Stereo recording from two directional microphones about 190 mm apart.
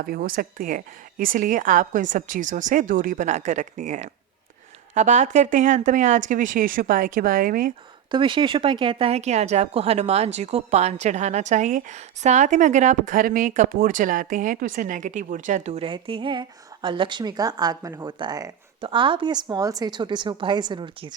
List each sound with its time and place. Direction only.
0.0 s speech: 50° right (ahead or behind)
8.1 s speech: 25° right (ahead or behind)